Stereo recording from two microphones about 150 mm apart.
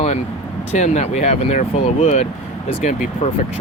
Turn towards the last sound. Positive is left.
turn(degrees=50)  # may be behind; listen again after turning